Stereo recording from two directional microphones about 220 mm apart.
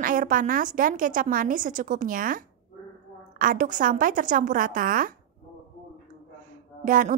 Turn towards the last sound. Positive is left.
turn(degrees=-40)  # may be behind; listen again after turning